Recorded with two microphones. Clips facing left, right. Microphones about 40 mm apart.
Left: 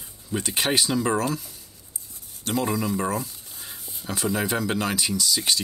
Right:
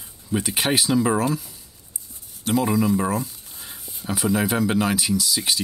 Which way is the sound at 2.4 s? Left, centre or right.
Centre.